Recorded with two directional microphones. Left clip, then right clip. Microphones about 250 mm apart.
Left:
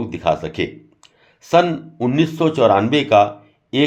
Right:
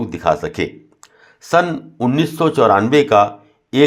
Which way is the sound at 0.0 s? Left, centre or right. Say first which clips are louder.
Right 2 dB; centre.